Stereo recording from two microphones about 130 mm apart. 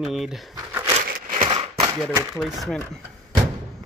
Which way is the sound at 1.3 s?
35° right (ahead or behind).